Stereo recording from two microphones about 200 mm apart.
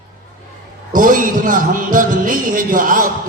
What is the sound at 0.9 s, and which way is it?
Speech, 40° right (ahead or behind).